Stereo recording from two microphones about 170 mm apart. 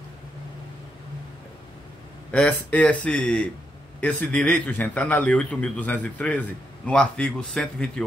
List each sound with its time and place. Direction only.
2.3 s a man's voice: 10° left (ahead or behind)